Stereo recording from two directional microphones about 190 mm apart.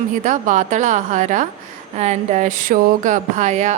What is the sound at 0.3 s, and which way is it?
Speech, 40° right (ahead or behind).